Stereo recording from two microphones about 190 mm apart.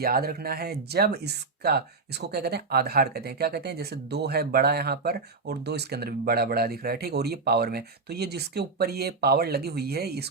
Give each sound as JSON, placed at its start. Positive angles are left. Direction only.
{"t": 0.0, "sound": "speech", "side_deg": -50}